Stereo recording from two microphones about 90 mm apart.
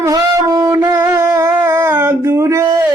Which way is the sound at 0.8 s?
25° right (ahead or behind).